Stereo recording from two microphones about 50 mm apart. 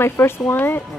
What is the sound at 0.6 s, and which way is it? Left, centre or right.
Speech, left.